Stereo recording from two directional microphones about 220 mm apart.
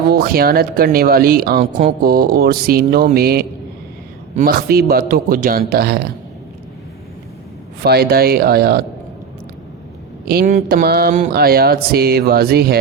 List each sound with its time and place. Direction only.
0.1 s speech: 45° right (ahead or behind)
7.8 s speech: 45° right (ahead or behind)
10.2 s speech: 40° right (ahead or behind)